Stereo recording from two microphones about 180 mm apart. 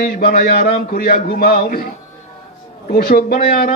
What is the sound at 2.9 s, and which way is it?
Speech, 60° left (ahead or behind).